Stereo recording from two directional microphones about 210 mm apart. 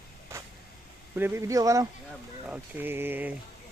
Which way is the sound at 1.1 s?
10° right (ahead or behind).